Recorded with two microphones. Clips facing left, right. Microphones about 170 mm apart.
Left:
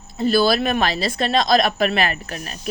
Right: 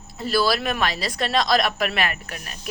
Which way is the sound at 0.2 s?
25° left (ahead or behind).